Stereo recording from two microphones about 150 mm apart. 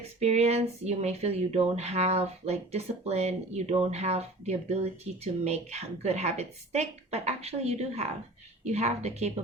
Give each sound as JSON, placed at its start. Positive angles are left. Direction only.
{"t": 0.2, "sound": "speech", "side_deg": -45}